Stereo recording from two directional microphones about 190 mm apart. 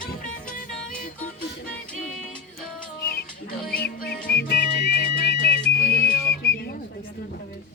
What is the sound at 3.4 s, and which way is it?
Music, 50° left (ahead or behind).